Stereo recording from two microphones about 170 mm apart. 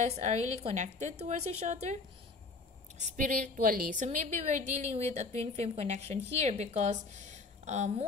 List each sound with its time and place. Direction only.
0.0 s a woman's voice: 40° right (ahead or behind)
3.0 s a woman's voice: 50° right (ahead or behind)